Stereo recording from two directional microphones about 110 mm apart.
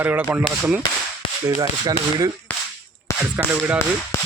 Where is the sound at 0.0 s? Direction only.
20° right (ahead or behind).